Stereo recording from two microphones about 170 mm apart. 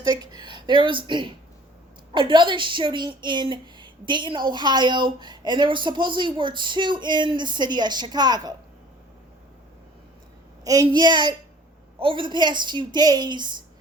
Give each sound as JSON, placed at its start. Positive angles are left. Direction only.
{"t": 0.1, "sound": "speech", "side_deg": -25}
{"t": 10.6, "sound": "speech", "side_deg": -20}